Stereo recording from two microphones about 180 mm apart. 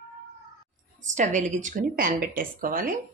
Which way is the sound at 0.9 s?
45° right (ahead or behind).